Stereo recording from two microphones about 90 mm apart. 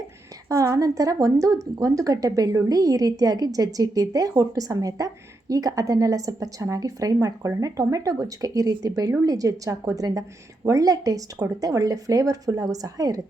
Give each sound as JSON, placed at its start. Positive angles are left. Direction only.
{"t": 0.4, "sound": "speech", "side_deg": -35}